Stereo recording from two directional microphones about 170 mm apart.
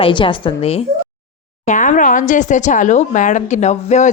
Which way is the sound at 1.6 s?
50° left (ahead or behind).